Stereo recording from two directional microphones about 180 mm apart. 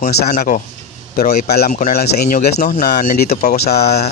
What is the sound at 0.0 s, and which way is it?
Speech, 45° left (ahead or behind).